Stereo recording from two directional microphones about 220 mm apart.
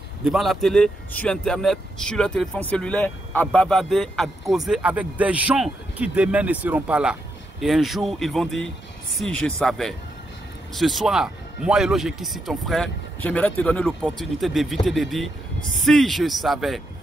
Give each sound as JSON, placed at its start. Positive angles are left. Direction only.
{"t": 0.2, "sound": "speech", "side_deg": 0}